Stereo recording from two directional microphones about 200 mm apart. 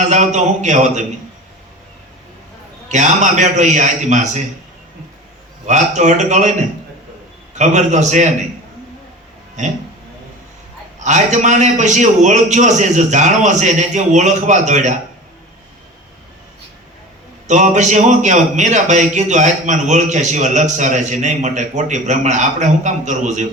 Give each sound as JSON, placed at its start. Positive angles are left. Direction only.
{"t": 0.1, "sound": "a man's voice", "side_deg": -35}
{"t": 2.9, "sound": "a man's voice", "side_deg": -35}
{"t": 5.6, "sound": "a man's voice", "side_deg": -35}
{"t": 11.0, "sound": "a man's voice", "side_deg": -35}
{"t": 17.5, "sound": "a man's voice", "side_deg": -35}